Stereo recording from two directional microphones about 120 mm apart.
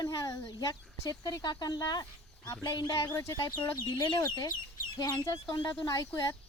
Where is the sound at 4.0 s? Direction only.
35° left (ahead or behind).